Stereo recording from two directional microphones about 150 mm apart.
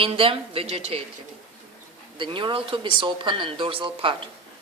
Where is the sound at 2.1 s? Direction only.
35° right (ahead or behind).